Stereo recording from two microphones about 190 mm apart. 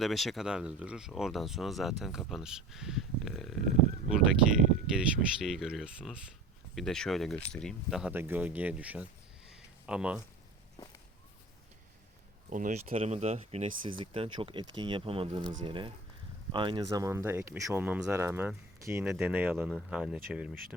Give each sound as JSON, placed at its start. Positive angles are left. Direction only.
{"t": 0.0, "sound": "speech", "side_deg": 0}
{"t": 4.9, "sound": "speech", "side_deg": -5}
{"t": 9.5, "sound": "a sound", "side_deg": -5}
{"t": 12.5, "sound": "speech", "side_deg": -40}
{"t": 19.0, "sound": "speech", "side_deg": -5}